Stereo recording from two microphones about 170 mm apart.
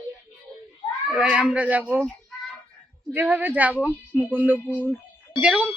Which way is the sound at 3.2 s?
10° right (ahead or behind).